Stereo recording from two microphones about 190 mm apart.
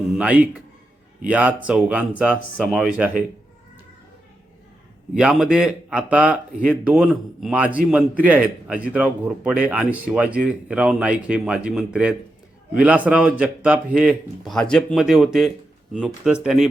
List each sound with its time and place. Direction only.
0.2 s speech: 5° right (ahead or behind)
5.1 s speech: 5° right (ahead or behind)